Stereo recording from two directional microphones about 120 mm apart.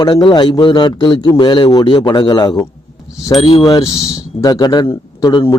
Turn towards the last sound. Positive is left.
turn(degrees=40)  # may be behind; listen again after turning